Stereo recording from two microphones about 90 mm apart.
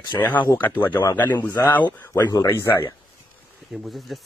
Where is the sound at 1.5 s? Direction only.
50° left (ahead or behind).